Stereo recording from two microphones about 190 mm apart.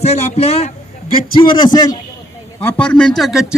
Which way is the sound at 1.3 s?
25° left (ahead or behind).